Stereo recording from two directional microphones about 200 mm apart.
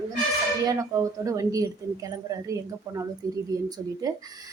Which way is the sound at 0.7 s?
15° right (ahead or behind).